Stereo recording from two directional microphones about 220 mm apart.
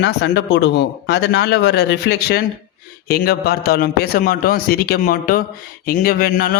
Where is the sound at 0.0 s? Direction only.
50° left (ahead or behind).